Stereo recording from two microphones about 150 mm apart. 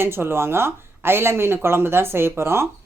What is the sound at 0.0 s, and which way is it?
Speech, 15° right (ahead or behind).